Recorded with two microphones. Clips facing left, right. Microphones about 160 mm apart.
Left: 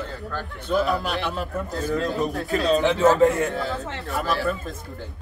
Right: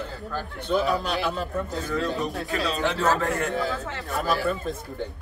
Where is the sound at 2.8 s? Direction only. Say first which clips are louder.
Left 7 dB; 20° left (ahead or behind).